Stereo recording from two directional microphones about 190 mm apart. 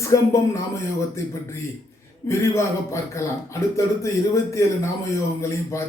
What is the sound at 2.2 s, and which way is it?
A man's voice, 15° left (ahead or behind).